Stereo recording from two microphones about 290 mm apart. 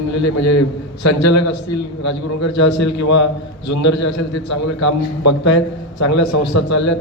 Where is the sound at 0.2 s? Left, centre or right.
Left.